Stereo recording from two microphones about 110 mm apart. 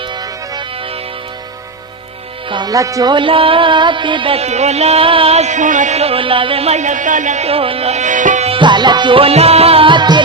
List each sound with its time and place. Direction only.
2.5 s music: 45° right (ahead or behind)
2.7 s speech: 30° right (ahead or behind)
3.1 s music: 50° right (ahead or behind)
4.4 s a sound: 85° right
7.3 s a sound: 65° right (ahead or behind); by 8.5 s 85° right
8.5 s music: 45° right (ahead or behind)